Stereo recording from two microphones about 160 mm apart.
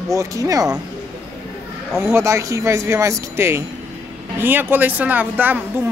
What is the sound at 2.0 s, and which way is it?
A woman's voice, 15° right (ahead or behind).